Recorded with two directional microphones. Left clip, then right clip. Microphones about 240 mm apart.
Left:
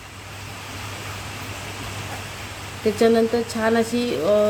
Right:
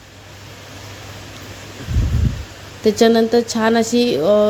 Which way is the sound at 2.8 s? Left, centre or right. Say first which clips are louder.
Right 4 dB; right.